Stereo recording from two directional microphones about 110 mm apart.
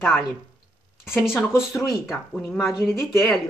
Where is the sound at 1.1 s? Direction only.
5° right (ahead or behind).